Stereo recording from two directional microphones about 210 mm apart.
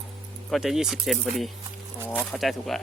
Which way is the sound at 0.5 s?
Centre (ahead or behind).